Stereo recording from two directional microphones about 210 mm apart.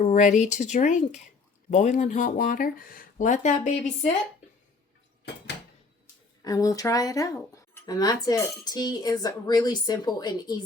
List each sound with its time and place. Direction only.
0.0 s speech: 35° left (ahead or behind)
6.4 s speech: 15° left (ahead or behind)